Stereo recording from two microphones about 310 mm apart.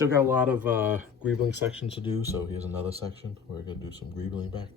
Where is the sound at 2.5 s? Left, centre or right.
Centre.